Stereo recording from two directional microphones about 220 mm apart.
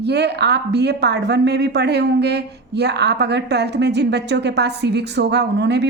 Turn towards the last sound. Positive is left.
turn(degrees=-50)  # may be behind; listen again after turning